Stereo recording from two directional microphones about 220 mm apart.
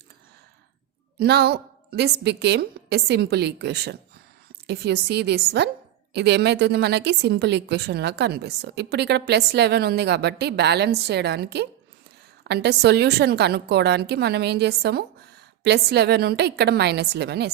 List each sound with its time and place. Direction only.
1.2 s a woman's voice: 50° right (ahead or behind)